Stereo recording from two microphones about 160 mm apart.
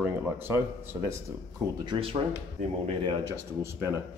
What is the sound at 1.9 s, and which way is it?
Speech, 35° right (ahead or behind).